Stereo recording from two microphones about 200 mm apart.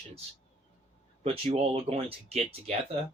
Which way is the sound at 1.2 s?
30° right (ahead or behind).